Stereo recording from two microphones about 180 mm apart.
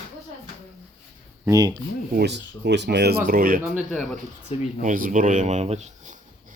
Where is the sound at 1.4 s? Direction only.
20° right (ahead or behind).